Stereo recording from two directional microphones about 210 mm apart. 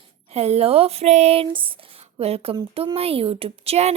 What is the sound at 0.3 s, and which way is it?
Speech, 30° right (ahead or behind).